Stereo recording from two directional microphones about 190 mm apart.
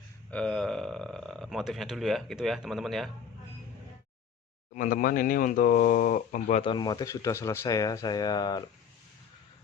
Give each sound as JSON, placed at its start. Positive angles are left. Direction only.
{"t": 0.3, "sound": "speech", "side_deg": 5}
{"t": 4.7, "sound": "speech", "side_deg": 45}
{"t": 6.6, "sound": "speech", "side_deg": 25}